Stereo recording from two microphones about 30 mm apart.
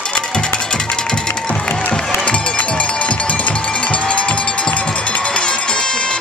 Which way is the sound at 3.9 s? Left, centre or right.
Left.